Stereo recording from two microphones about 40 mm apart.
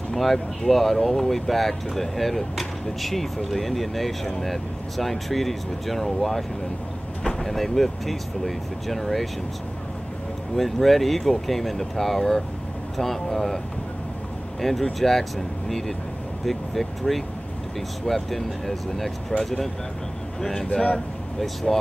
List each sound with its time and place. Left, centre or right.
0.1 s speech: centre
10.5 s speech: centre
14.6 s speech: centre
20.3 s speech: centre